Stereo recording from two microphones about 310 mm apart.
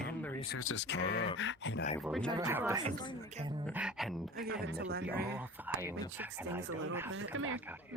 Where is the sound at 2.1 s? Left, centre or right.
Centre.